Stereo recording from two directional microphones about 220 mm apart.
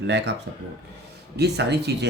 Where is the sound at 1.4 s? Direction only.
50° right (ahead or behind).